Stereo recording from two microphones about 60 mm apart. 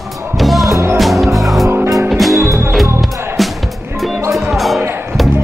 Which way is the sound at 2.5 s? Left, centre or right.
Right.